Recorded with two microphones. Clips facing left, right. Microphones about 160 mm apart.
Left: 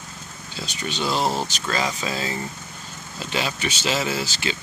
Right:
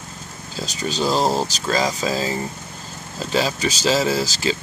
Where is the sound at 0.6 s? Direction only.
40° right (ahead or behind).